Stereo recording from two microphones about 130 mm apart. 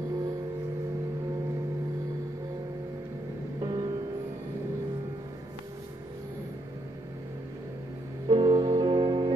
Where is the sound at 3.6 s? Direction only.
35° right (ahead or behind).